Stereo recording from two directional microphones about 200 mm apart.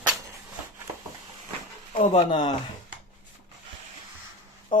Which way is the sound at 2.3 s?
25° left (ahead or behind).